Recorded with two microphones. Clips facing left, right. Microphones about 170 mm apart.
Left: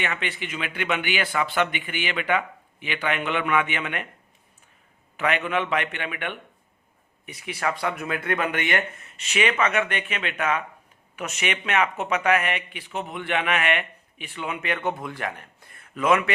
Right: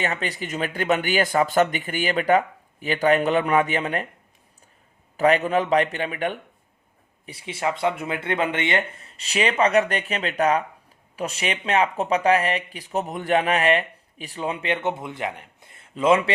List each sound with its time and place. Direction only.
0.0 s speech: 35° right (ahead or behind)
5.1 s speech: 35° right (ahead or behind)